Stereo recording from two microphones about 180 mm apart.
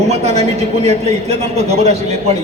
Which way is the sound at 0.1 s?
35° right (ahead or behind).